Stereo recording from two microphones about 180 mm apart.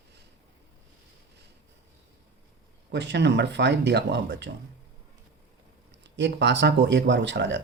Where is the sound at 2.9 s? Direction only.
70° right (ahead or behind).